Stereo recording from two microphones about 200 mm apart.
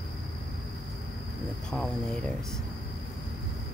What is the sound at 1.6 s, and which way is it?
Speech, 5° left (ahead or behind).